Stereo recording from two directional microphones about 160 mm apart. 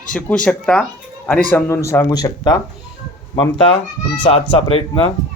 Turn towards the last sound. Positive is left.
turn(degrees=35)  # may be behind; listen again after turning